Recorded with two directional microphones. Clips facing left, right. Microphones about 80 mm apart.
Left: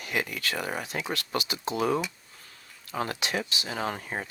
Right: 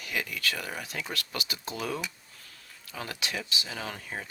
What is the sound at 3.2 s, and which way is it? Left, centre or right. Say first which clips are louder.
Speech: left 4 dB; left.